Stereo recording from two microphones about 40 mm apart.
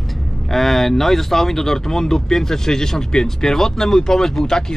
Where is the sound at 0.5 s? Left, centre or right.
Centre.